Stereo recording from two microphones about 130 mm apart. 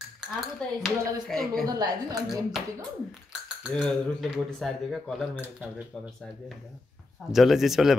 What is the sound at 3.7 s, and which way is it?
Speech, centre (ahead or behind).